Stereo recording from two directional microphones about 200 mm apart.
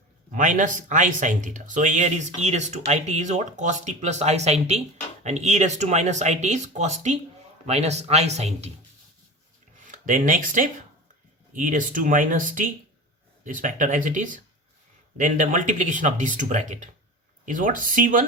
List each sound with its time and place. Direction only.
0.3 s speech: 40° right (ahead or behind)
9.8 s speech: 40° right (ahead or behind)